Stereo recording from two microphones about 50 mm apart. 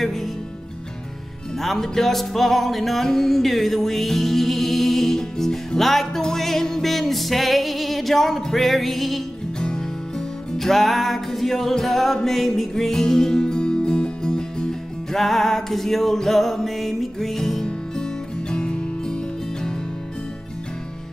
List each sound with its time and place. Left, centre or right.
0.0 s music: centre
1.6 s music: centre
9.6 s music: centre
15.1 s music: centre